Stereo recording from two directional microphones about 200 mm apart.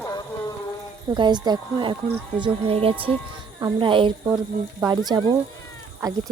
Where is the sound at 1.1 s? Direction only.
20° right (ahead or behind).